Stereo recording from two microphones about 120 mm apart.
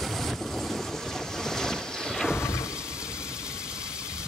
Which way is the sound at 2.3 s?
20° left (ahead or behind).